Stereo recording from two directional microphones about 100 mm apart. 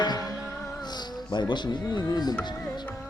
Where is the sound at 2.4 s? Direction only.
45° left (ahead or behind).